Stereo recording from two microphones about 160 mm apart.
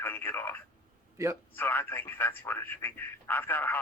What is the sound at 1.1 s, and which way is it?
Speech, 20° right (ahead or behind).